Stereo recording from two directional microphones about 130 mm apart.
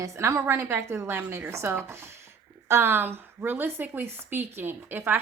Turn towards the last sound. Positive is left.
turn(degrees=-15)  # may be behind; listen again after turning